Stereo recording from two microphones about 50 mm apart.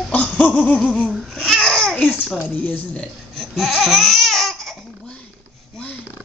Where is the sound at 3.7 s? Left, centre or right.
Centre.